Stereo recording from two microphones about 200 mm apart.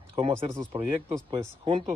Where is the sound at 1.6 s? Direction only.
25° right (ahead or behind).